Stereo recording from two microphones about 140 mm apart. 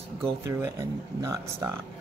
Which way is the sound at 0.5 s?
20° right (ahead or behind).